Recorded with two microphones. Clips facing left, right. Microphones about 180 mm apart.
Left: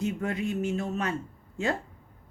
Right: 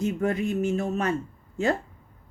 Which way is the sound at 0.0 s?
45° right (ahead or behind).